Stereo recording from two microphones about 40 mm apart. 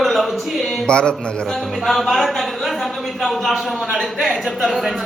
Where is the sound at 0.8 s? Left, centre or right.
Left.